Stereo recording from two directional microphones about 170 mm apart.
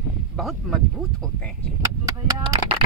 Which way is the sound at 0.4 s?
Centre (ahead or behind).